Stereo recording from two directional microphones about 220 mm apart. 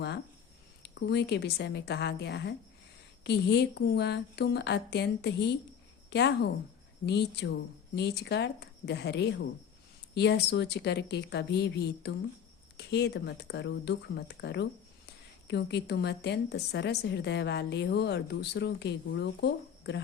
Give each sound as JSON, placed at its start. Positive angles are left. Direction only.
{"t": 0.8, "sound": "a woman's voice", "side_deg": 50}